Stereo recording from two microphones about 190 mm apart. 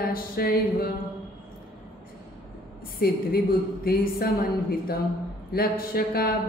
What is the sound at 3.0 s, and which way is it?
A man's voice, 55° left (ahead or behind).